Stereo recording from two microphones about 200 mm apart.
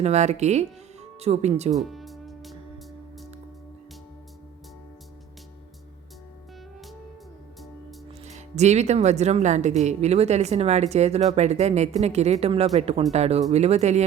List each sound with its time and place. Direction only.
0.0 s speech: 35° right (ahead or behind)
1.7 s music: centre (ahead or behind)
8.2 s speech: 35° right (ahead or behind)